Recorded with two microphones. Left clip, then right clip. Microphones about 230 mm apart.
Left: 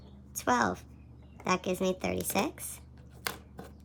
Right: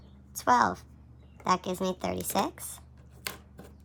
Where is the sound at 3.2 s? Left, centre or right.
Centre.